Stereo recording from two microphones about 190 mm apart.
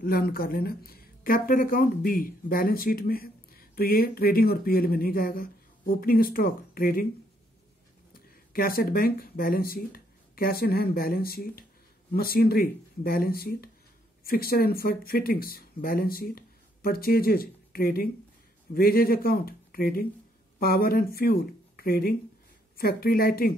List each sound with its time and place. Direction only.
0.0 s speech: 50° left (ahead or behind)
8.1 s speech: 50° left (ahead or behind)